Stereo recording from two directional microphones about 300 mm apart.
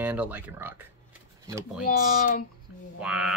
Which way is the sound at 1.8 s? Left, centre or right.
Left.